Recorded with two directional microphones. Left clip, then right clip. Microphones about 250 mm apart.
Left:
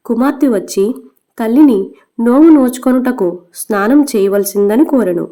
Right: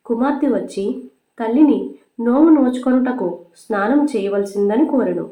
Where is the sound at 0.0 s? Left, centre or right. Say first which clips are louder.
Left 5 dB; left.